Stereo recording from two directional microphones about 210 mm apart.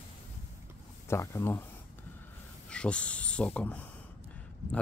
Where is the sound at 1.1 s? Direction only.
10° left (ahead or behind).